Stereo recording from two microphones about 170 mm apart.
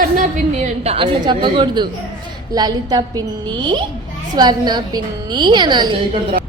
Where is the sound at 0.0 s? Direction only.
50° right (ahead or behind).